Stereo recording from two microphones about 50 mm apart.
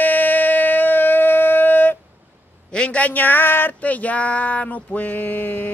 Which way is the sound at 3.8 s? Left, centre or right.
Left.